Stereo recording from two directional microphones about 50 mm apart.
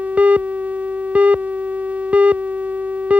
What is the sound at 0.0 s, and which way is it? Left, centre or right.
Busy signal, right.